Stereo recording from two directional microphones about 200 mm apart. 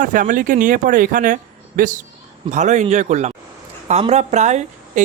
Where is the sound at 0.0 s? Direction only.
40° right (ahead or behind).